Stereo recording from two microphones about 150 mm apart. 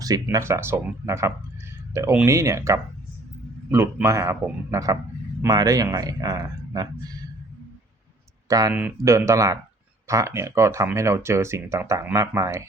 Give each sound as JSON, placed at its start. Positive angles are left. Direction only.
{"t": 0.0, "sound": "speech", "side_deg": -25}
{"t": 8.4, "sound": "speech", "side_deg": -25}